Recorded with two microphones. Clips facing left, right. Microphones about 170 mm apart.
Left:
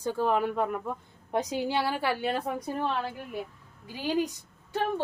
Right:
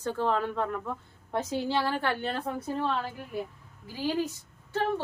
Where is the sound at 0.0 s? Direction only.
10° left (ahead or behind).